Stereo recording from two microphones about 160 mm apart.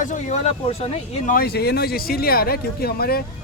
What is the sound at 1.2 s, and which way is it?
Speech, 70° left (ahead or behind).